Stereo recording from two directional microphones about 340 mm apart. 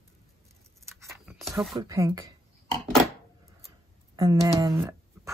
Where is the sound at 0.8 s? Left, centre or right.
Centre.